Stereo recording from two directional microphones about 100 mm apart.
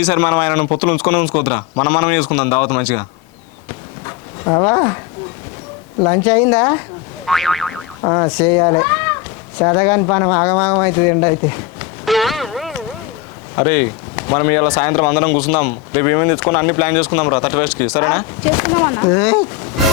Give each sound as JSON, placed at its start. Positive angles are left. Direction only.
{"t": 0.0, "sound": "speech", "side_deg": 25}
{"t": 4.4, "sound": "speech", "side_deg": 35}
{"t": 6.2, "sound": "speech", "side_deg": 25}
{"t": 7.3, "sound": "boing", "side_deg": 0}
{"t": 8.0, "sound": "speech", "side_deg": 35}
{"t": 12.0, "sound": "a sound", "side_deg": 0}
{"t": 13.6, "sound": "speech", "side_deg": 25}
{"t": 19.2, "sound": "speech", "side_deg": 20}